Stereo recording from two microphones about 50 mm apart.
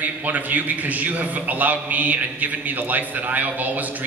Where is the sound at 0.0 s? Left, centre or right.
Right.